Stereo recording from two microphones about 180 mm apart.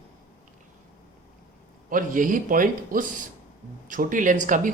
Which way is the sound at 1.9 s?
50° right (ahead or behind).